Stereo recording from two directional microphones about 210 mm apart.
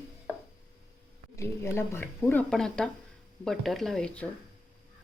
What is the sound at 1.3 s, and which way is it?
Speech, 15° left (ahead or behind).